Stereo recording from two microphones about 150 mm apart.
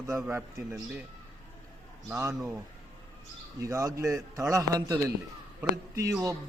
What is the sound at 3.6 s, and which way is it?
A man's voice, 20° right (ahead or behind).